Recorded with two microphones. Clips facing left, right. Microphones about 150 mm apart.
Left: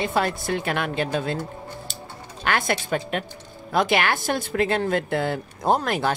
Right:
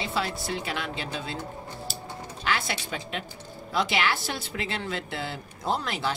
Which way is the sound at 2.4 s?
55° left (ahead or behind).